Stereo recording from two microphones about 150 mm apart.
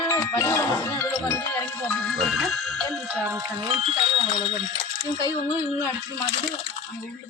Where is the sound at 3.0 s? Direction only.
15° right (ahead or behind).